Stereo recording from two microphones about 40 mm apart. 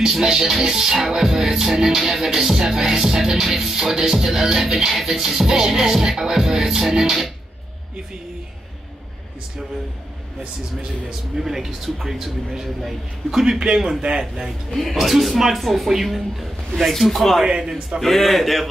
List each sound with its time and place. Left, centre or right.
0.0 s music: centre
10.8 s music: centre
14.8 s speech: centre
17.5 s music: centre
18.0 s speech: centre